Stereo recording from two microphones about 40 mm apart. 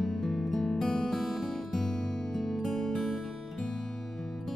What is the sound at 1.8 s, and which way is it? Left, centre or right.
Music, left.